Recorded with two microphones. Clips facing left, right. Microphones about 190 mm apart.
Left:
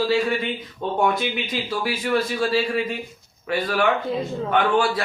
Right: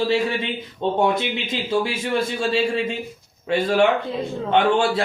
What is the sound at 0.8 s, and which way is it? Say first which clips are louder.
A man's voice: right 2 dB; 25° right (ahead or behind).